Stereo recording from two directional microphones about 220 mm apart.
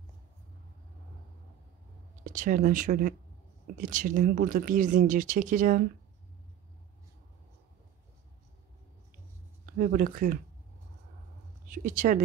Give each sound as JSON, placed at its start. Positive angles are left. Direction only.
{"t": 2.2, "sound": "speech", "side_deg": -35}
{"t": 9.8, "sound": "speech", "side_deg": -40}
{"t": 11.7, "sound": "speech", "side_deg": -35}